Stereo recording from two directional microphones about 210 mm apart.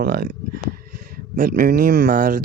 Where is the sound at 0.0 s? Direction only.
45° right (ahead or behind).